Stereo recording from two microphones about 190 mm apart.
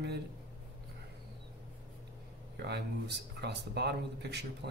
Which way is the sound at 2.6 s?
60° right (ahead or behind).